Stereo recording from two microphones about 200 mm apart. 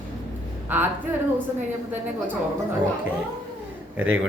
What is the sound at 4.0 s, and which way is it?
Speech, 85° right.